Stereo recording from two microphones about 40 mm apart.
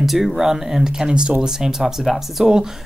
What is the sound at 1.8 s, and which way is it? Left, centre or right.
Speech, centre.